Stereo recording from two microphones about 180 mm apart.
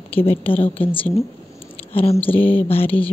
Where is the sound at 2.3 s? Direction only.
10° left (ahead or behind).